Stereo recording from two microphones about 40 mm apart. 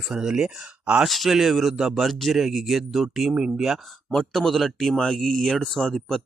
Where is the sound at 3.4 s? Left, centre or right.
Centre.